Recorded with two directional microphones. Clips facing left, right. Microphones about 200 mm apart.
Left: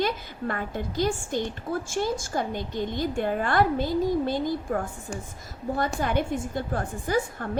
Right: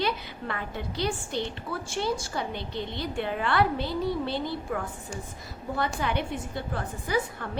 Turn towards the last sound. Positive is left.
turn(degrees=45)  # may be behind; listen again after turning